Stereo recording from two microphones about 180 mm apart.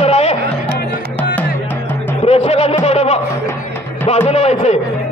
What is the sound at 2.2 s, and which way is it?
Speech, 35° left (ahead or behind).